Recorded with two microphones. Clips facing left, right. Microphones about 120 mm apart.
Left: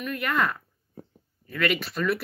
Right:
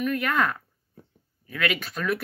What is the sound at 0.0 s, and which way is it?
Speech, centre (ahead or behind).